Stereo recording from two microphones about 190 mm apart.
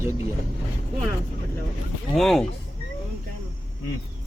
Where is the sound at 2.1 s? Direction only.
Centre (ahead or behind).